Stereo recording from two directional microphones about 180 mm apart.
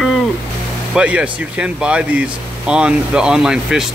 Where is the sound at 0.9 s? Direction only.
5° right (ahead or behind).